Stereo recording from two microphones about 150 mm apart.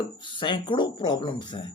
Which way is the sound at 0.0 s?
30° left (ahead or behind).